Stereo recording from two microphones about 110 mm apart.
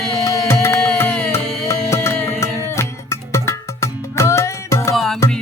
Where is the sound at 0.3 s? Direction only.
25° left (ahead or behind).